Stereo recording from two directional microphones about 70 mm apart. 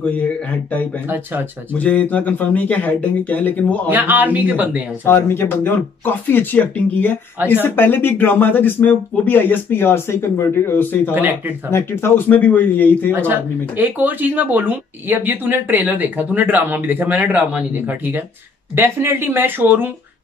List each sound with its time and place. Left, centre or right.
1.0 s speech: right
1.7 s speech: left
3.9 s speech: right
5.0 s speech: left
12.3 s speech: left
13.3 s speech: right